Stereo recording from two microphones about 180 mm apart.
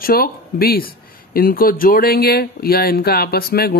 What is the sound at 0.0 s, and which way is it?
Speech, 55° left (ahead or behind).